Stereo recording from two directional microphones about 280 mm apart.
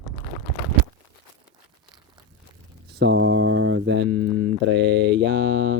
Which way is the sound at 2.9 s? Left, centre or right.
Right.